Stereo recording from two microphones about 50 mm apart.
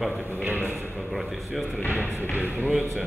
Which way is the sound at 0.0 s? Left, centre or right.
Centre.